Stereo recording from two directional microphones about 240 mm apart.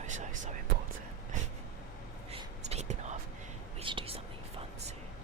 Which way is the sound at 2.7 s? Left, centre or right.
Right.